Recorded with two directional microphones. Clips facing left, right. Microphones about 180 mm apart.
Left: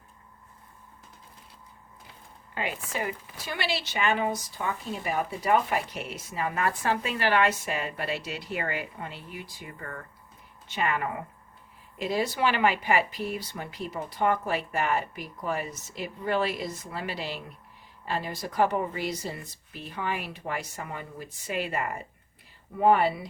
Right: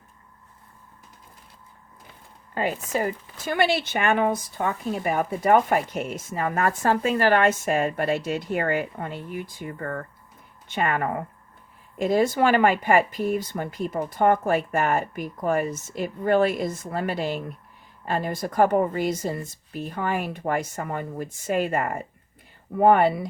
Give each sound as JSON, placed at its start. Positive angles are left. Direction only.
{"t": 2.6, "sound": "speech", "side_deg": -40}